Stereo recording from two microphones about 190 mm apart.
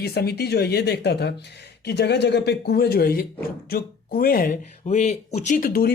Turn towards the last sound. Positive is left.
turn(degrees=50)  # may be behind; listen again after turning